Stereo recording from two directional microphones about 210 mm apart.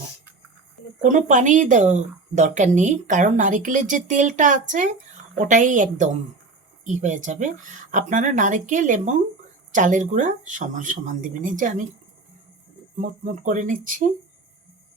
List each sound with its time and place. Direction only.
1.0 s speech: 35° right (ahead or behind)
13.0 s speech: 35° right (ahead or behind)